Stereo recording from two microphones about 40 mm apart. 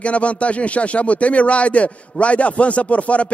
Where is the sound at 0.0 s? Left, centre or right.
Left.